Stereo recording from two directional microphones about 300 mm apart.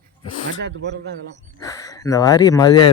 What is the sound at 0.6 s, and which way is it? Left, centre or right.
Speech, right.